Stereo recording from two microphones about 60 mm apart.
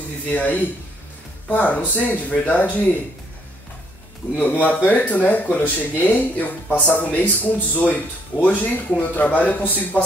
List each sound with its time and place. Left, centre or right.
0.3 s speech: left
4.4 s speech: left